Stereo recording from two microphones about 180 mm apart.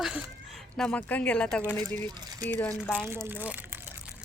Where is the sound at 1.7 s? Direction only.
10° left (ahead or behind).